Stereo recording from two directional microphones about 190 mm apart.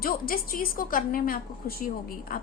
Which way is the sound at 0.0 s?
50° left (ahead or behind).